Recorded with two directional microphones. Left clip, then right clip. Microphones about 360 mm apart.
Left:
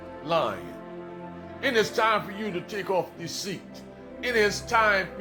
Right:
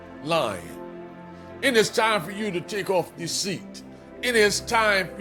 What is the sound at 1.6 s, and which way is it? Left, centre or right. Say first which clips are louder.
Speech: right 3 dB; centre.